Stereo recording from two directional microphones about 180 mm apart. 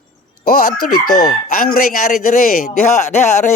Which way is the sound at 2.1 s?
45° left (ahead or behind).